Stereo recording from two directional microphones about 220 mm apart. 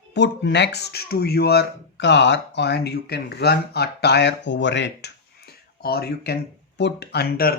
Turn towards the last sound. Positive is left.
turn(degrees=45)  # may be behind; listen again after turning